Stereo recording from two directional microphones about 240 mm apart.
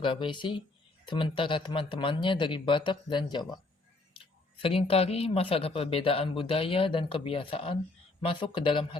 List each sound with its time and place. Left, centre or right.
0.0 s speech: centre